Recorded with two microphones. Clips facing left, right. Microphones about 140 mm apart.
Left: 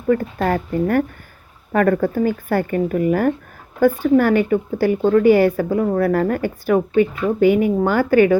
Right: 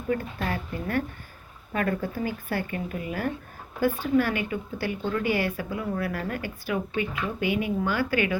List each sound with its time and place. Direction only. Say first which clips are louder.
0.1 s speech: left 11 dB; 55° left (ahead or behind)